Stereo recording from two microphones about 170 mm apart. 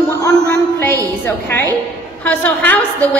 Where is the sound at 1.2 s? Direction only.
15° left (ahead or behind).